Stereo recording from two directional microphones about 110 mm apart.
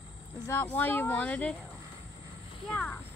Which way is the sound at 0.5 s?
20° left (ahead or behind).